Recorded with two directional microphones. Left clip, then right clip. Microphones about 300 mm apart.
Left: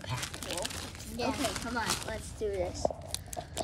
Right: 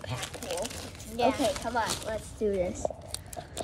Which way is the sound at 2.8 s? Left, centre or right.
Centre.